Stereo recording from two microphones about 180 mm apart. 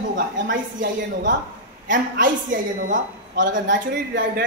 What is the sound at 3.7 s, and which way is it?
Speech, 90° right.